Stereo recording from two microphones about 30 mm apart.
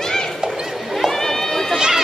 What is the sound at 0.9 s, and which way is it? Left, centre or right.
Run, centre.